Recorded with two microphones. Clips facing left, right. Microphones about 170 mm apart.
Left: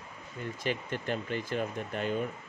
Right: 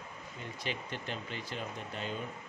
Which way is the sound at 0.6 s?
50° left (ahead or behind).